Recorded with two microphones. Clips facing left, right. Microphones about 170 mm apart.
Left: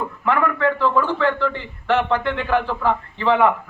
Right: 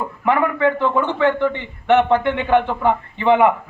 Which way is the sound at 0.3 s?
20° right (ahead or behind).